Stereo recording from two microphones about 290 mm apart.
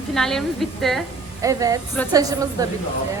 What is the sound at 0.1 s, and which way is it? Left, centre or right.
Speech, centre.